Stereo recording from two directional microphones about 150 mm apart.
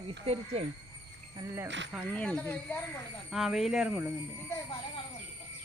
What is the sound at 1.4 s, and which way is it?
Speech, 15° right (ahead or behind).